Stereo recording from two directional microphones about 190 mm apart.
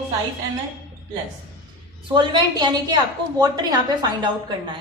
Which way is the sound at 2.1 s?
25° right (ahead or behind).